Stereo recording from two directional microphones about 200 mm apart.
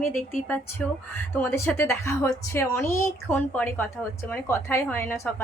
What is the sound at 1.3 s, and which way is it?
A woman's voice, 10° left (ahead or behind).